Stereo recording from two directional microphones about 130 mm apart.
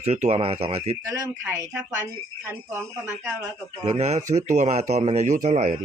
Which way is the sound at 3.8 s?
55° right (ahead or behind).